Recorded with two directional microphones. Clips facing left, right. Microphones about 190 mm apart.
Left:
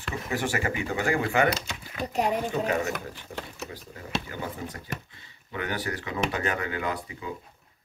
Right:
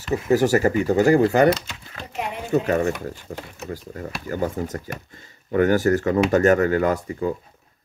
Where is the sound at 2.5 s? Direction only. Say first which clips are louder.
Right 7 dB; 45° right (ahead or behind).